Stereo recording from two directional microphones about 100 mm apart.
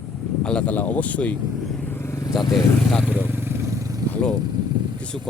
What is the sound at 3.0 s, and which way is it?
Motorcycle, 15° right (ahead or behind).